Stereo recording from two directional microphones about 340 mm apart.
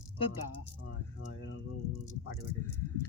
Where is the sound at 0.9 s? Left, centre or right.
Left.